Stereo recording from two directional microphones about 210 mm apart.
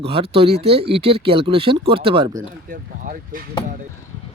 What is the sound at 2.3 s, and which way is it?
Speech, 40° right (ahead or behind).